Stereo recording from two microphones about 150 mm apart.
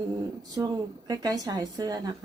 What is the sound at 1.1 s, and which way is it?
A woman's voice, 25° right (ahead or behind).